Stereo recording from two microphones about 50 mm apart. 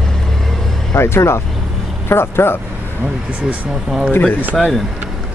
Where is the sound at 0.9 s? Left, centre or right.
Left.